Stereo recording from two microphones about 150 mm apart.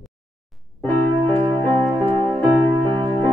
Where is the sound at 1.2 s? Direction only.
35° right (ahead or behind).